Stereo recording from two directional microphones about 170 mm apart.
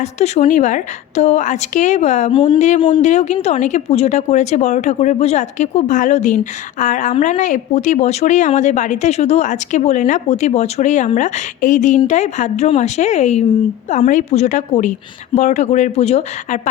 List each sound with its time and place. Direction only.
0.0 s a woman's voice: 40° left (ahead or behind)
2.3 s speech: 30° left (ahead or behind)
2.6 s a woman's voice: 45° left (ahead or behind)